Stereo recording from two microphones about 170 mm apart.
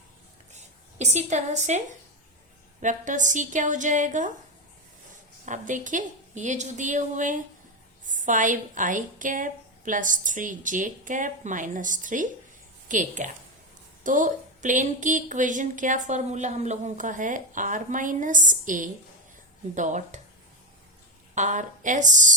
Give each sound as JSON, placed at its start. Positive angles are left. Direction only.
{"t": 0.5, "sound": "speech", "side_deg": -40}
{"t": 5.5, "sound": "speech", "side_deg": -50}
{"t": 21.3, "sound": "speech", "side_deg": -45}